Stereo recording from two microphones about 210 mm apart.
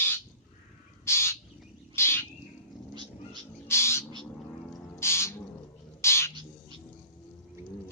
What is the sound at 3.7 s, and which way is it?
Bird, 10° left (ahead or behind).